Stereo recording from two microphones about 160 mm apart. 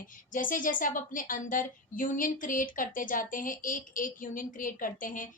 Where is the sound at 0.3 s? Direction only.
55° left (ahead or behind).